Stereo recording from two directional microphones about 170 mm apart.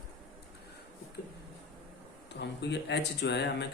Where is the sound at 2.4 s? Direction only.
85° left.